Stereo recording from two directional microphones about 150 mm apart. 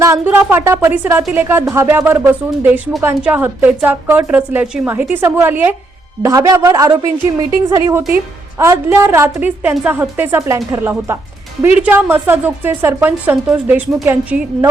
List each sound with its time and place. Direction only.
0.0 s a woman's voice: 15° right (ahead or behind)